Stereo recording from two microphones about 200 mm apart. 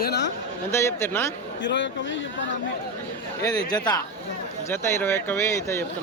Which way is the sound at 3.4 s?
20° left (ahead or behind).